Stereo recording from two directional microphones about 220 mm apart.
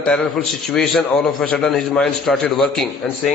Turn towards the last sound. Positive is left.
turn(degrees=5)  # may be behind; listen again after turning